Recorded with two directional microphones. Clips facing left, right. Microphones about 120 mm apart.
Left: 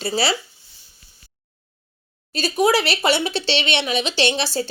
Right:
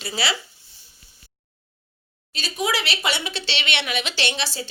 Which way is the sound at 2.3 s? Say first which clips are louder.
Left 8 dB; 40° left (ahead or behind).